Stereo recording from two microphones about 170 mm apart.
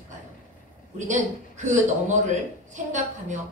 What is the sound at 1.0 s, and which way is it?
A woman's voice, 45° right (ahead or behind).